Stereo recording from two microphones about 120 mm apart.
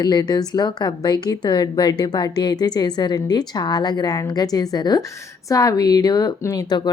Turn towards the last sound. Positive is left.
turn(degrees=35)  # may be behind; listen again after turning